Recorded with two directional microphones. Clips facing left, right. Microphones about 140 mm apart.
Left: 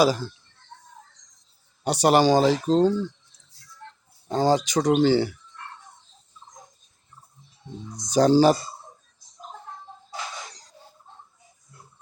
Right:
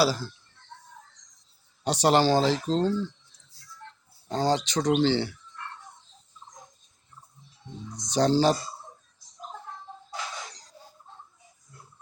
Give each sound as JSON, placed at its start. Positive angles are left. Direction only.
{"t": 0.0, "sound": "speech", "side_deg": 15}
{"t": 1.8, "sound": "speech", "side_deg": 10}
{"t": 4.3, "sound": "speech", "side_deg": 10}
{"t": 7.9, "sound": "speech", "side_deg": 10}